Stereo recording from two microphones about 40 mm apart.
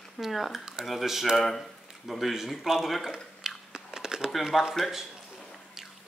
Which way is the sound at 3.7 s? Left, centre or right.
Centre.